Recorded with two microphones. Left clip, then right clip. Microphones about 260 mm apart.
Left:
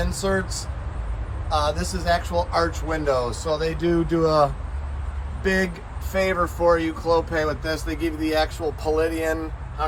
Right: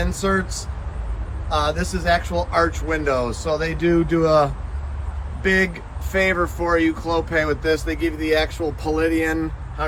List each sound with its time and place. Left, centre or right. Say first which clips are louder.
0.0 s speech: right 2 dB; centre
1.5 s speech: right 2 dB; centre